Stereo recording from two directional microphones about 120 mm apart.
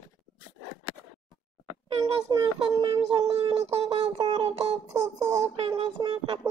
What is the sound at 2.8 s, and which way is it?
Speech, 45° right (ahead or behind).